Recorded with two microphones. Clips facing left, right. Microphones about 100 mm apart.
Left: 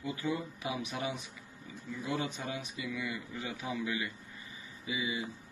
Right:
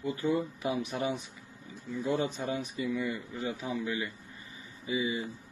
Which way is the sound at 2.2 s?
45° right (ahead or behind).